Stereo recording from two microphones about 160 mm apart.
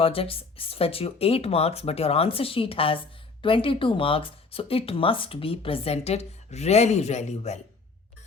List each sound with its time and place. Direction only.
0.0 s speech: 35° left (ahead or behind)